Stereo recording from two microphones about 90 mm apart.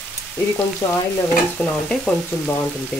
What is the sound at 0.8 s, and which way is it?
Stir, 40° left (ahead or behind).